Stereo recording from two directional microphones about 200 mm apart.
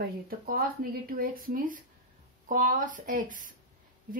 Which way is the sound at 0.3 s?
45° right (ahead or behind).